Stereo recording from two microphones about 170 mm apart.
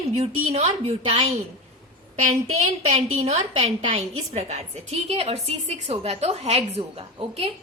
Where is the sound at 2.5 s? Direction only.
40° right (ahead or behind).